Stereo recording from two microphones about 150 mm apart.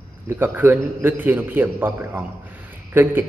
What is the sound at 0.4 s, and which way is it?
A man's voice, 15° right (ahead or behind).